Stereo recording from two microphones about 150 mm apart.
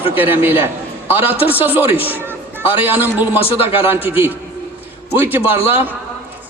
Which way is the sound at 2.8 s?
15° right (ahead or behind).